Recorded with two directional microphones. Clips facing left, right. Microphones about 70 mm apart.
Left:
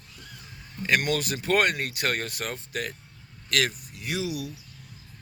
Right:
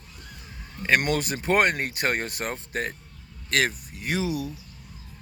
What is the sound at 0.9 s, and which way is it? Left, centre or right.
Speech, right.